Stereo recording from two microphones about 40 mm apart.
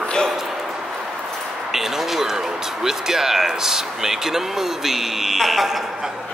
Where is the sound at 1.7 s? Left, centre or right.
Centre.